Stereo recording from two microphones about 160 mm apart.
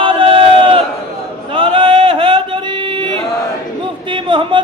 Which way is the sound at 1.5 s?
35° right (ahead or behind).